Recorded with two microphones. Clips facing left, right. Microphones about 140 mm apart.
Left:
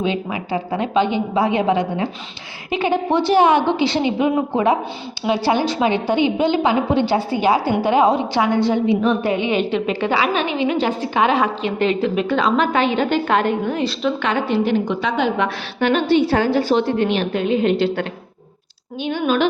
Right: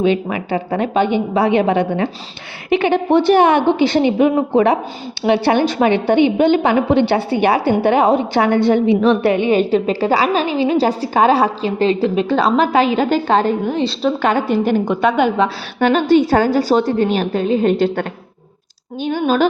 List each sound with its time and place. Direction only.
0.0 s a woman's voice: 60° right (ahead or behind); by 9.4 s 80° right
9.4 s a woman's voice: 45° right (ahead or behind)
19.2 s a woman's voice: 40° right (ahead or behind)